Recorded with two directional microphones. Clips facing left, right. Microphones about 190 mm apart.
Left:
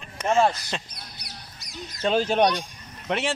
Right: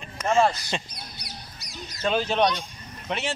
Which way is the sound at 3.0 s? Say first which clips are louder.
Left 3 dB; 80° left.